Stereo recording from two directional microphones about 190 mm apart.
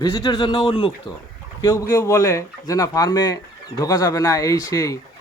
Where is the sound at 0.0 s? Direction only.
20° left (ahead or behind).